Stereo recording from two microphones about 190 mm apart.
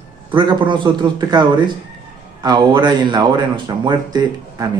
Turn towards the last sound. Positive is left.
turn(degrees=-20)  # may be behind; listen again after turning